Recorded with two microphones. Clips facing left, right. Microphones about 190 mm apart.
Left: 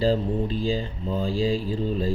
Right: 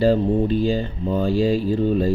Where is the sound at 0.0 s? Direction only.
65° right (ahead or behind).